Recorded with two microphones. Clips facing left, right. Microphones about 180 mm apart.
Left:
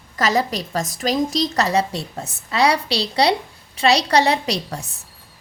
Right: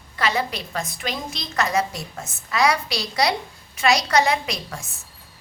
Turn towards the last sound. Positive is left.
turn(degrees=35)  # may be behind; listen again after turning